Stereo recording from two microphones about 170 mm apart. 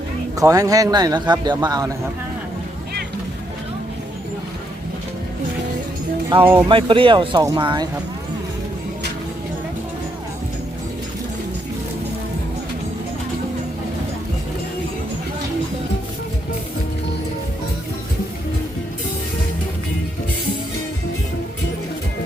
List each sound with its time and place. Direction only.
0.3 s a man's voice: 20° right (ahead or behind)
6.4 s speech: 10° right (ahead or behind)
6.7 s a man's voice: 30° right (ahead or behind)